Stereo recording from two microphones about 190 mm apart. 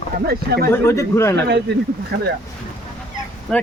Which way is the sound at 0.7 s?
15° left (ahead or behind).